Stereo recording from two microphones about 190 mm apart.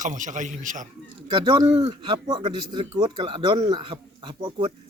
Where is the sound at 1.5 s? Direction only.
25° right (ahead or behind).